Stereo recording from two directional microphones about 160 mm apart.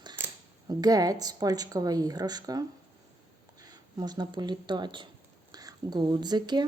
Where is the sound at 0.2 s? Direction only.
15° right (ahead or behind).